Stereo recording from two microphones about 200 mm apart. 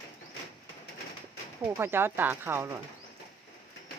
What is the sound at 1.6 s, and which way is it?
Speech, 10° right (ahead or behind).